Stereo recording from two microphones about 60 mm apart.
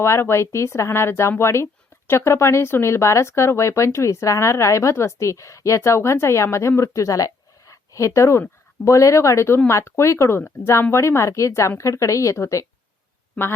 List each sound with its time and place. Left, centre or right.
0.0 s speech: left